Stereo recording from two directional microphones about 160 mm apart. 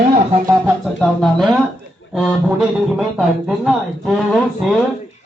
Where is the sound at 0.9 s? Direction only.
5° left (ahead or behind).